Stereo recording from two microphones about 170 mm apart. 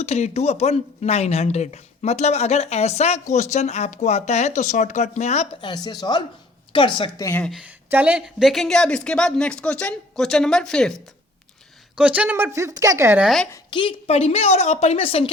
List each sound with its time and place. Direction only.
0.0 s speech: 40° left (ahead or behind)
5.6 s speech: 25° left (ahead or behind)
7.3 s speech: 10° left (ahead or behind)
7.5 s a woman's voice: 10° right (ahead or behind)
11.9 s speech: 5° right (ahead or behind)
13.2 s a woman's voice: centre (ahead or behind)
13.5 s speech: 30° left (ahead or behind)